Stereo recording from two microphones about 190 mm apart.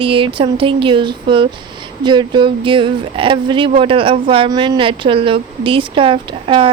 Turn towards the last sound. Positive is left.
turn(degrees=-25)  # may be behind; listen again after turning